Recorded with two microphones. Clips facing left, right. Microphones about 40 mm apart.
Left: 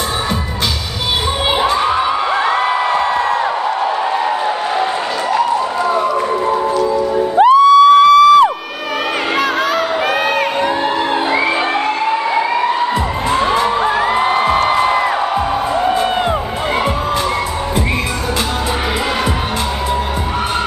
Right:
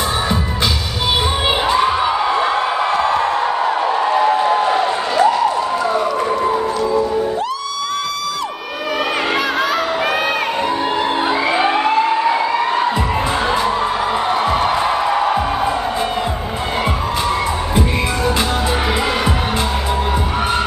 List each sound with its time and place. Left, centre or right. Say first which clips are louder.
7.3 s music: left 15 dB; left
14.2 s music: left 3 dB; left